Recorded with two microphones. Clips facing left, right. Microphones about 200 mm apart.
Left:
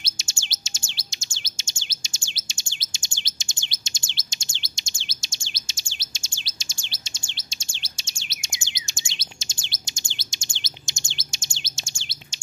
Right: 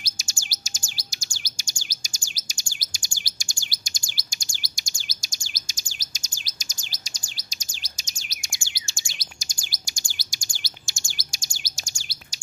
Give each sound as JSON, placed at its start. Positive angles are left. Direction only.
{"t": 0.0, "sound": "bird", "side_deg": 25}